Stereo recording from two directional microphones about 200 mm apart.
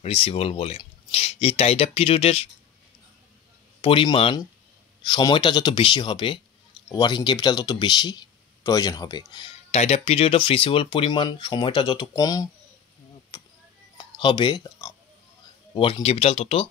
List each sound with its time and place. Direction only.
0.0 s speech: 30° left (ahead or behind)
3.8 s speech: 25° left (ahead or behind)
13.3 s a sound: 20° left (ahead or behind)
15.7 s speech: 25° left (ahead or behind)